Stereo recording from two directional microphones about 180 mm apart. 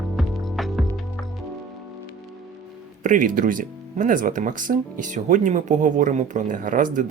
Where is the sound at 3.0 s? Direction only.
45° right (ahead or behind).